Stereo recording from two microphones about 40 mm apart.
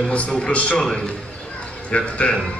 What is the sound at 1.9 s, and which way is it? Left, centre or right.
Speech, left.